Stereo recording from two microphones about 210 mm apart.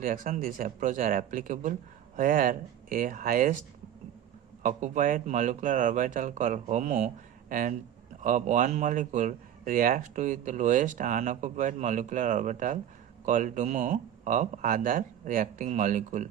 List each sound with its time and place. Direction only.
0.0 s speech: 40° right (ahead or behind)
4.6 s speech: 40° right (ahead or behind)